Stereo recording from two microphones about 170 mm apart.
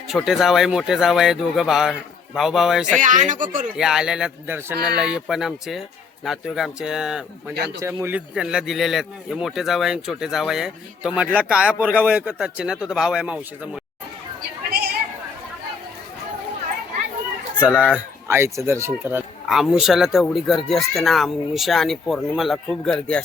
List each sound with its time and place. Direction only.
0.1 s a man's voice: centre (ahead or behind)
3.0 s speech: 50° right (ahead or behind)
3.8 s a man's voice: 5° right (ahead or behind)
7.8 s a man's voice: 15° right (ahead or behind)
8.4 s a man's voice: 5° right (ahead or behind)
17.7 s a man's voice: 10° right (ahead or behind)
19.5 s a man's voice: 5° right (ahead or behind)